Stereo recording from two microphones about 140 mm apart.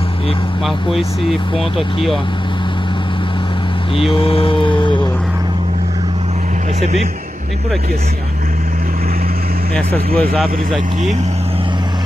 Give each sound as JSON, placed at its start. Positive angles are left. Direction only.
{"t": 0.7, "sound": "speech", "side_deg": 0}
{"t": 4.1, "sound": "mantra", "side_deg": 40}
{"t": 9.8, "sound": "speech", "side_deg": 5}